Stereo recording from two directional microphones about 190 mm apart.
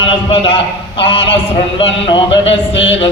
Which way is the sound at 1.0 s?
25° left (ahead or behind).